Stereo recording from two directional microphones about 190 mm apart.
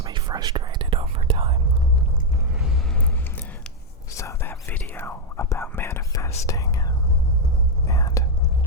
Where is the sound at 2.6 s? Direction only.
Centre (ahead or behind).